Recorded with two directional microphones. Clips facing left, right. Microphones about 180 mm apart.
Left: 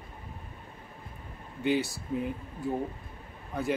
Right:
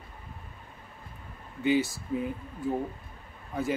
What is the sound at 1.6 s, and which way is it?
Speech, centre (ahead or behind).